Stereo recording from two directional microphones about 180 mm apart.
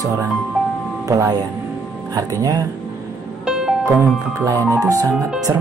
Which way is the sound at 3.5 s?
5° right (ahead or behind).